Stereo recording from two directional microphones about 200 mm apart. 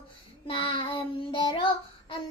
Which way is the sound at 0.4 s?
25° left (ahead or behind).